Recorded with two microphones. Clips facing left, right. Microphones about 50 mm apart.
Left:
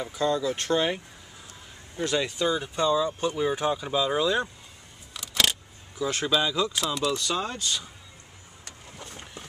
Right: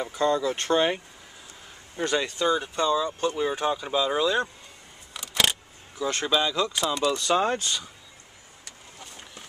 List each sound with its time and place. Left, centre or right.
0.0 s speech: centre
2.2 s speech: centre
5.1 s keys jangling: centre
7.4 s speech: right
9.0 s a sound: left